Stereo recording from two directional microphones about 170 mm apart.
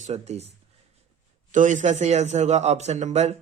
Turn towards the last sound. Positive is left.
turn(degrees=-40)  # may be behind; listen again after turning